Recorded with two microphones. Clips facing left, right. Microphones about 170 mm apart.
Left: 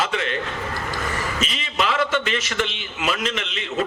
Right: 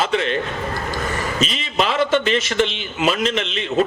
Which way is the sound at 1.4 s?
30° right (ahead or behind).